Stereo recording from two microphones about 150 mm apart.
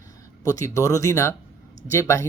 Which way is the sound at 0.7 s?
20° left (ahead or behind).